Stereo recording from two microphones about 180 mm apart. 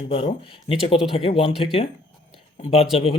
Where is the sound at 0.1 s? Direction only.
30° left (ahead or behind).